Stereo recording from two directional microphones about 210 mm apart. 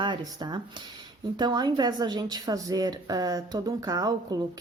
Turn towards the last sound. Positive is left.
turn(degrees=-15)  # may be behind; listen again after turning